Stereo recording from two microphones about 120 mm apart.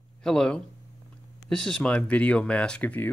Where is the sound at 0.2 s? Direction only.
5° left (ahead or behind).